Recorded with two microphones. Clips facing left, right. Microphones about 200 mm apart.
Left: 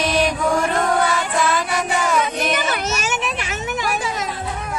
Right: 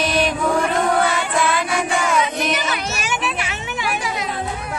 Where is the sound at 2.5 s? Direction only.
45° left (ahead or behind).